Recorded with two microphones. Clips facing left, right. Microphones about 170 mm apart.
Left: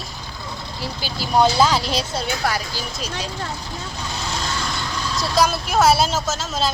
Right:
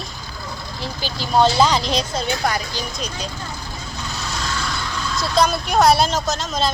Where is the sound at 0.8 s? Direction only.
10° left (ahead or behind).